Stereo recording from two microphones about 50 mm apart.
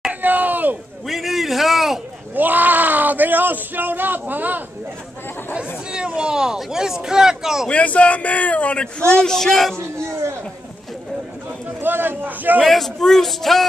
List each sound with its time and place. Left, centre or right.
0.1 s a sound: right
1.0 s a sound: centre
2.3 s speech: right
6.0 s speech: centre
7.7 s speech: left
9.1 s music: centre
10.0 s speech: right
11.8 s speech: right
12.6 s a man's voice: centre